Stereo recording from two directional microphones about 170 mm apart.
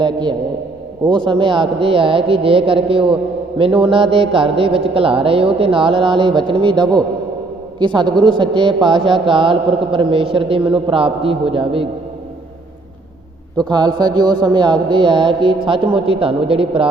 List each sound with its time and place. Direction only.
0.0 s a man's voice: 25° right (ahead or behind)
13.7 s speech: 25° right (ahead or behind)